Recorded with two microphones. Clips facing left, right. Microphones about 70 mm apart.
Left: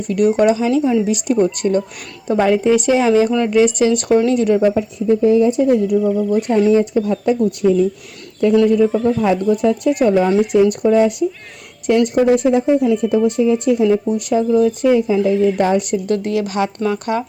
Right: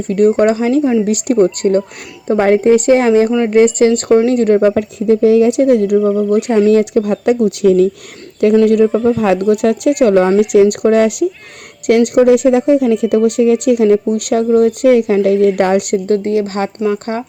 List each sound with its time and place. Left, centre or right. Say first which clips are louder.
0.1 s a woman's voice: right 3 dB; right
9.0 s speech: right 3 dB; centre
9.2 s speech: right 3 dB; right
13.2 s speech: right 4 dB; right
13.8 s speech: right 4 dB; right
16.0 s speech: right 4 dB; right